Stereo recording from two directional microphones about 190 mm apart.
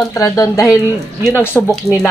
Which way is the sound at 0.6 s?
Centre (ahead or behind).